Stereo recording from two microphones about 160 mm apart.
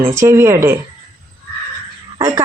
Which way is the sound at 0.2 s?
15° right (ahead or behind).